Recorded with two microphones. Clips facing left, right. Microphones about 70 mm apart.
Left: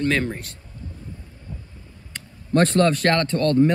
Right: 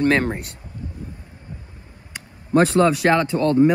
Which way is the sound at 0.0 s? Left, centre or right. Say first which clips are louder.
Right 4 dB; right.